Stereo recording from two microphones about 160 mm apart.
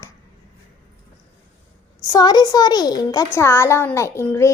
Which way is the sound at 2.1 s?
25° left (ahead or behind).